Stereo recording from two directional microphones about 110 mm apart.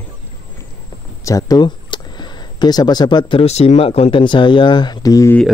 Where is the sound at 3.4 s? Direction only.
75° left (ahead or behind); by 5.3 s 35° left (ahead or behind).